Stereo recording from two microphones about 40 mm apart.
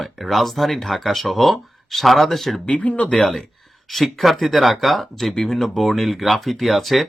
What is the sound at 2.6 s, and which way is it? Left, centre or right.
Speech, left.